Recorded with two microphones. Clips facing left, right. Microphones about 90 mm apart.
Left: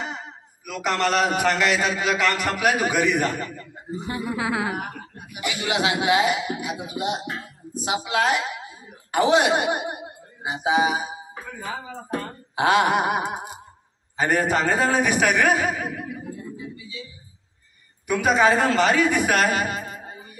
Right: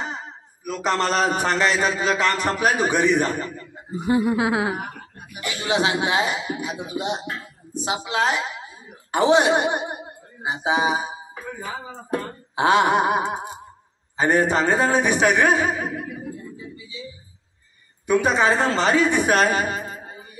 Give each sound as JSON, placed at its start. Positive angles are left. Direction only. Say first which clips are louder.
{"t": 0.0, "sound": "a man's voice", "louder": "right 1 dB", "side_deg": -35}
{"t": 5.6, "sound": "a man's voice", "louder": "right 2 dB", "side_deg": -30}
{"t": 12.5, "sound": "a man's voice", "louder": "right 2 dB", "side_deg": -30}
{"t": 18.0, "sound": "a man's voice", "louder": "even", "side_deg": -30}